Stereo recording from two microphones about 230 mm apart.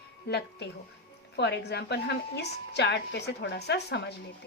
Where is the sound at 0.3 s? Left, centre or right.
Left.